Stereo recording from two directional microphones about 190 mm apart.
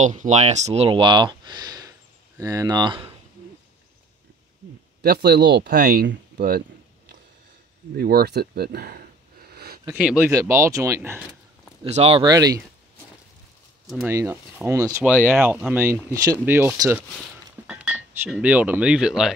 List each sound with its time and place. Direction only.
0.0 s speech: 40° right (ahead or behind); by 3.1 s 25° right (ahead or behind)
5.0 s speech: 60° right (ahead or behind)
5.7 s speech: 50° right (ahead or behind)
7.9 s speech: 55° right (ahead or behind)
9.5 s a sound: 55° right (ahead or behind)
9.9 s speech: 5° right (ahead or behind)
11.8 s speech: 30° right (ahead or behind)
14.0 s speech: 15° right (ahead or behind)